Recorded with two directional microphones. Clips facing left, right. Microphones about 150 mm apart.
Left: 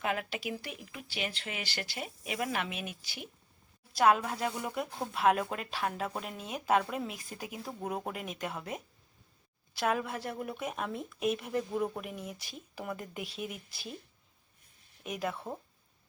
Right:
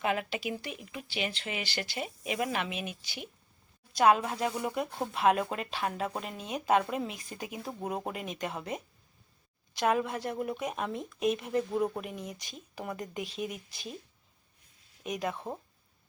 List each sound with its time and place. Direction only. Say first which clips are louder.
0.0 s speech: right 3 dB; centre (ahead or behind)
15.0 s speech: right 2 dB; 5° left (ahead or behind)